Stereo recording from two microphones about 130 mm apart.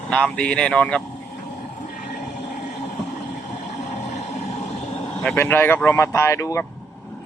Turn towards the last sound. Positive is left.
turn(degrees=20)  # may be behind; listen again after turning